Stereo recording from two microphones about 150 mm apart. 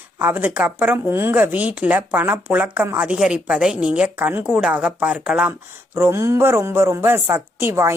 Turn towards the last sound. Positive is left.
turn(degrees=-15)  # may be behind; listen again after turning